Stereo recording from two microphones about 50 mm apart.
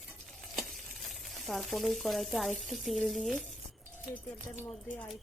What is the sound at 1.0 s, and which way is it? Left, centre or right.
Speech, centre.